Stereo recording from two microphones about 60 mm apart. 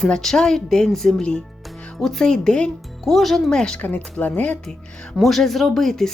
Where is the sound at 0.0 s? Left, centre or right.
Centre.